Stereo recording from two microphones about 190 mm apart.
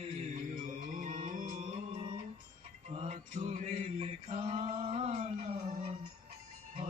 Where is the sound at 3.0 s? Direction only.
40° right (ahead or behind).